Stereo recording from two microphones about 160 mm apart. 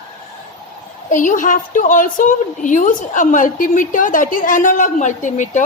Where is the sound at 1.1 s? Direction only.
55° left (ahead or behind).